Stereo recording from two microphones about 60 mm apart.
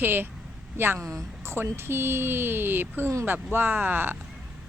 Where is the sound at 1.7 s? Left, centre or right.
Right.